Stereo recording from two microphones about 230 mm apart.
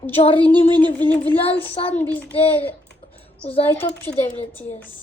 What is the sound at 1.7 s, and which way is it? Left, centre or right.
Speech, left.